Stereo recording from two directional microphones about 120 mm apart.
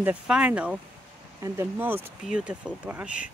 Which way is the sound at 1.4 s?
20° right (ahead or behind).